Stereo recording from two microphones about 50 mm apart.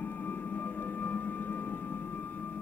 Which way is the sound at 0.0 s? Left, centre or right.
Left.